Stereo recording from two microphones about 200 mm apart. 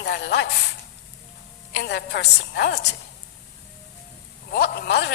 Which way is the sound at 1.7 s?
60° left (ahead or behind).